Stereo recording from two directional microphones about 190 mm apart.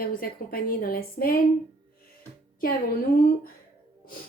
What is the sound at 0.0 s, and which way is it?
A woman's voice, 50° left (ahead or behind).